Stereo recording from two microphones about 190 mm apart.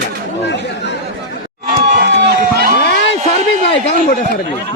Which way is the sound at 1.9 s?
55° right (ahead or behind).